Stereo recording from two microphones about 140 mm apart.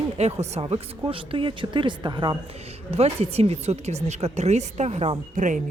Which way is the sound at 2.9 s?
45° right (ahead or behind).